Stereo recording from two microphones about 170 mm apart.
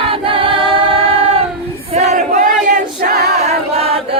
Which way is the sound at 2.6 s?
45° right (ahead or behind).